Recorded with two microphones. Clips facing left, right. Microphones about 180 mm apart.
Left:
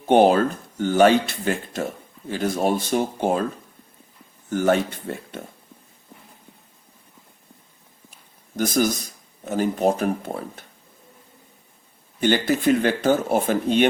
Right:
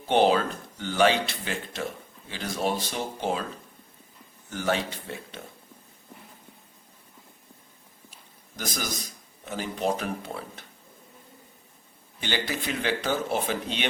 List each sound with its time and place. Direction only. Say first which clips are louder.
0.1 s speech: left 6 dB; 50° left (ahead or behind)
4.4 s speech: left 8 dB; 50° left (ahead or behind)
8.5 s speech: left 12 dB; 50° left (ahead or behind)
12.2 s speech: left 11 dB; 50° left (ahead or behind)